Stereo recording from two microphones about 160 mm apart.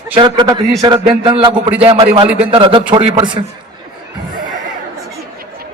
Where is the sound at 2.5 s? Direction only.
30° right (ahead or behind).